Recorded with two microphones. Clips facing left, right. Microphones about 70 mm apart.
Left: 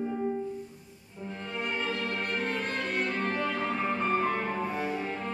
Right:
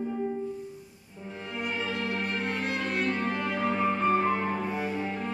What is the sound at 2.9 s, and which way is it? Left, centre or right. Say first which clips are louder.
Music: even; centre.